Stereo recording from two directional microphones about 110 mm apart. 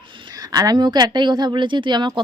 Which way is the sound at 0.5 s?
35° right (ahead or behind).